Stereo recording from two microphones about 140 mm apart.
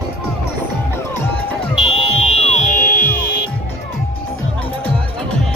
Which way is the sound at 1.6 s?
40° left (ahead or behind).